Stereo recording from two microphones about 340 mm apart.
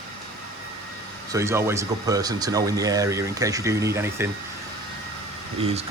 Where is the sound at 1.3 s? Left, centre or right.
Centre.